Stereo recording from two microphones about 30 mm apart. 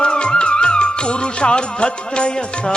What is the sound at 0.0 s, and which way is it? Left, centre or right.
Music, left.